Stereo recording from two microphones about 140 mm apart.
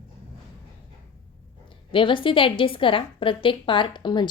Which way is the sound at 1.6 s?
35° left (ahead or behind).